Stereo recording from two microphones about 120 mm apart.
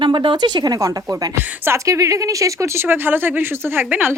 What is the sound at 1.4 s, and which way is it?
Speech, 20° right (ahead or behind).